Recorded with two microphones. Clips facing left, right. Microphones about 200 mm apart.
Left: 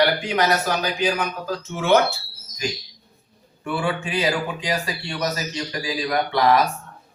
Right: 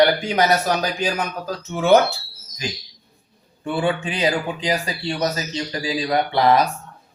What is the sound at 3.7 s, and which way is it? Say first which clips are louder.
Speech: right 3 dB; 25° right (ahead or behind).